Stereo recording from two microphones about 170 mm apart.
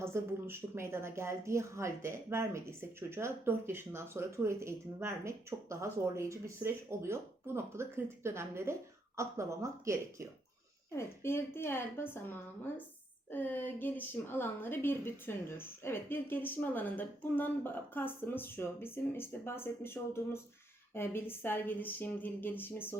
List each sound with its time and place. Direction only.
0.0 s speech: 15° right (ahead or behind)
10.9 s a woman's voice: 15° left (ahead or behind)